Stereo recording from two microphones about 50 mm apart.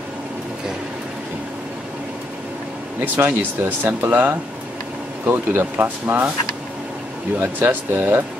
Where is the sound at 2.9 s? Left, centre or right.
Right.